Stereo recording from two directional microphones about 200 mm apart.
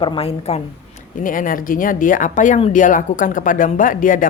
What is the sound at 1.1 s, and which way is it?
Speech, 40° left (ahead or behind).